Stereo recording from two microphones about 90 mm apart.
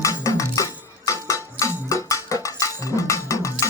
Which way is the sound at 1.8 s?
35° left (ahead or behind).